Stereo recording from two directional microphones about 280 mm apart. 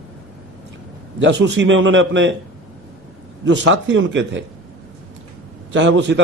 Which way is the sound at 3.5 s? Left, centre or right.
Right.